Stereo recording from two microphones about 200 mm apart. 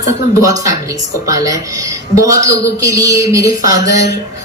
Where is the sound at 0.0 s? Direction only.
15° right (ahead or behind).